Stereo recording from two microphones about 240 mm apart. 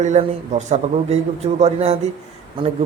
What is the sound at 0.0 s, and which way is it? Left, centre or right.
Speech, right.